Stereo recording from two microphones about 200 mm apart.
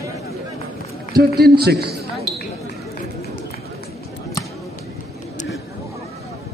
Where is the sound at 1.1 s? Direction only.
50° right (ahead or behind).